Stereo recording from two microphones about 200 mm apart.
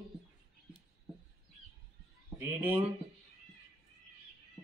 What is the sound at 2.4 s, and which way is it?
Speech, 10° right (ahead or behind).